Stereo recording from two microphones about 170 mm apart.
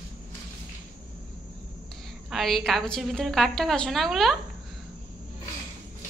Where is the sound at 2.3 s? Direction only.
Centre (ahead or behind).